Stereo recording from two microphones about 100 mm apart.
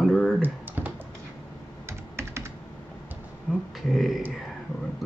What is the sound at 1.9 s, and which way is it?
Computer keyboard, 25° right (ahead or behind).